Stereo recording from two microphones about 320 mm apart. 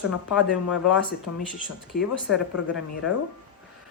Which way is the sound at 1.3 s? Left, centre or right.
Left.